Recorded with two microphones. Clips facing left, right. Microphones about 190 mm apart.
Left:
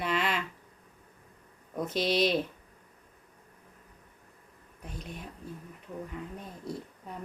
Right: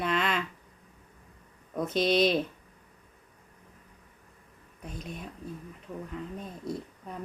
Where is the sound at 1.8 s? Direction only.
55° right (ahead or behind).